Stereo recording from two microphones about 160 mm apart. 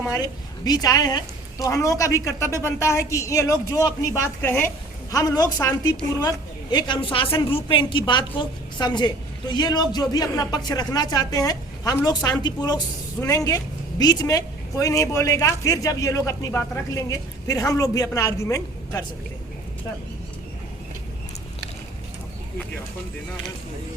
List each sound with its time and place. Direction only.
0.1 s a woman's voice: 25° left (ahead or behind)